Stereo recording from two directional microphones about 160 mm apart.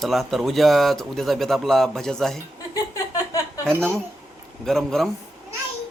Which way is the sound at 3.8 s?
5° left (ahead or behind).